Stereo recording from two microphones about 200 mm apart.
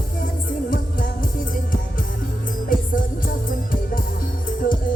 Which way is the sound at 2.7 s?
45° left (ahead or behind).